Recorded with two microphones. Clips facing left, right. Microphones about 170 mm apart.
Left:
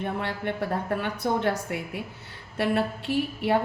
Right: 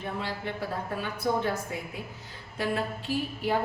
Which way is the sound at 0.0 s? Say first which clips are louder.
Left 4 dB; 60° left (ahead or behind).